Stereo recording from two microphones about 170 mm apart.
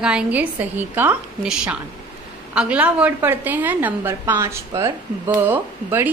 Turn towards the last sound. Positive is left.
turn(degrees=-10)  # may be behind; listen again after turning